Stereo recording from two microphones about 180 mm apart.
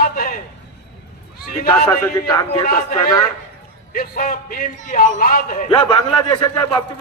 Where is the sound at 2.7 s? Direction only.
55° left (ahead or behind).